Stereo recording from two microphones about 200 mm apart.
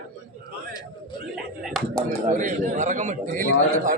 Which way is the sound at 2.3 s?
40° right (ahead or behind).